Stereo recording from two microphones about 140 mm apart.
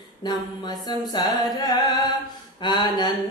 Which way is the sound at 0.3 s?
30° left (ahead or behind).